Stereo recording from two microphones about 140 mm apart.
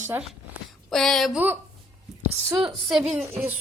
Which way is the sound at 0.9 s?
5° left (ahead or behind).